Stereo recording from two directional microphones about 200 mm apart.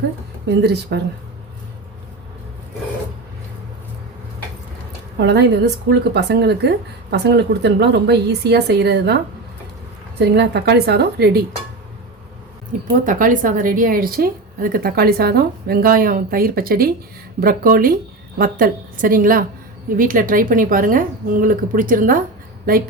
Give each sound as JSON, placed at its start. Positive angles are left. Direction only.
{"t": 0.4, "sound": "speech", "side_deg": -55}
{"t": 5.1, "sound": "speech", "side_deg": -55}
{"t": 10.2, "sound": "speech", "side_deg": -55}
{"t": 12.7, "sound": "a woman's voice", "side_deg": -40}